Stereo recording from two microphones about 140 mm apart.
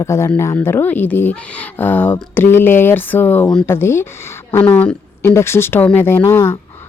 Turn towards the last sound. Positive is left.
turn(degrees=20)  # may be behind; listen again after turning